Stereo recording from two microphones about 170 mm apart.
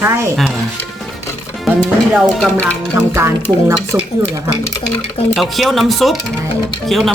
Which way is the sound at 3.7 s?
15° right (ahead or behind).